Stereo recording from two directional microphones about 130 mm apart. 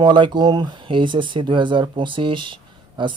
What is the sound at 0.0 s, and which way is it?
Speech, 35° right (ahead or behind).